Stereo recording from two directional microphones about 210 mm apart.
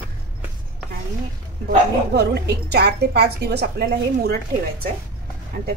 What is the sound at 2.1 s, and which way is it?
A woman's voice, 50° right (ahead or behind).